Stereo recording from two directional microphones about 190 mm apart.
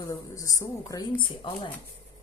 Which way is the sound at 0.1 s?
20° left (ahead or behind).